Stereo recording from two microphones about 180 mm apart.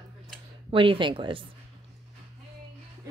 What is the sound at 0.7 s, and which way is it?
Speech, 30° right (ahead or behind).